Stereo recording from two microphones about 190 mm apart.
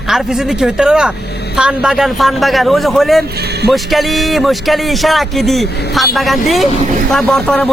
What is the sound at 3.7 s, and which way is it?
Speech, centre (ahead or behind).